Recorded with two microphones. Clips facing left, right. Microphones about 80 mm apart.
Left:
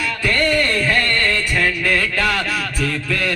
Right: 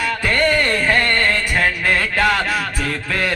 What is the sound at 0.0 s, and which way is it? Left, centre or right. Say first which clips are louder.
Music: right 1 dB; right.